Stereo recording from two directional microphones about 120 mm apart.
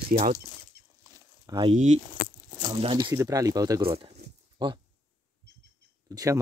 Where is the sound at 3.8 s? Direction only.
45° right (ahead or behind).